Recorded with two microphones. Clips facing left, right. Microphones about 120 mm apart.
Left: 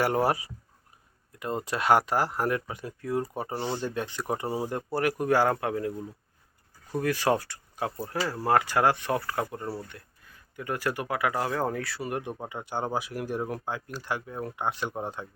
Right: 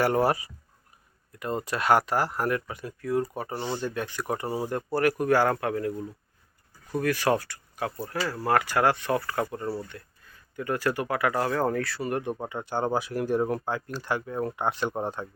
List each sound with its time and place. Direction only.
0.0 s speech: 15° left (ahead or behind)
7.0 s speech: 20° left (ahead or behind); by 14.9 s centre (ahead or behind)